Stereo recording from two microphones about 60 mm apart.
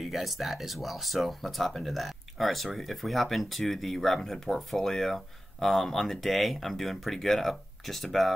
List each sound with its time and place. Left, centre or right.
0.0 s speech: centre